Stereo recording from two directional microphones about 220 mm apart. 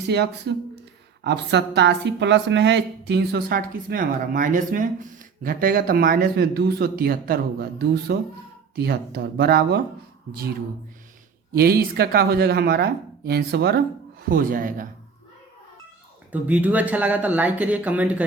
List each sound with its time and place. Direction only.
0.1 s a woman's voice: 50° right (ahead or behind)
11.5 s a woman's voice: 45° right (ahead or behind)
16.3 s speech: 5° right (ahead or behind)